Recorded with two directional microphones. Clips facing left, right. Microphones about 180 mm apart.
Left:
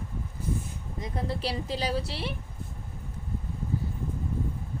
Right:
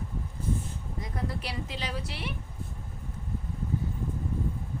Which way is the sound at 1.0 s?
25° left (ahead or behind).